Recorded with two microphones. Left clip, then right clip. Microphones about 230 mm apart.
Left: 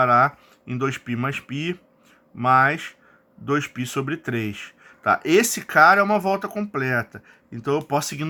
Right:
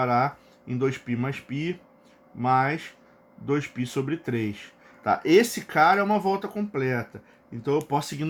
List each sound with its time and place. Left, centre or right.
0.0 s speech: left